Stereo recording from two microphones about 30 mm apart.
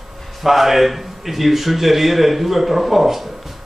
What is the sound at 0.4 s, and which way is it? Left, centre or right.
Speech, centre.